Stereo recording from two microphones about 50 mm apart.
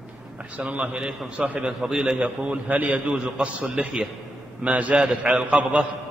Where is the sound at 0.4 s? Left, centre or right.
Right.